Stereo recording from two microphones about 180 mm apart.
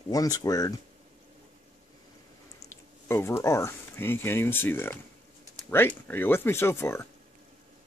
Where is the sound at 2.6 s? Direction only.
15° left (ahead or behind).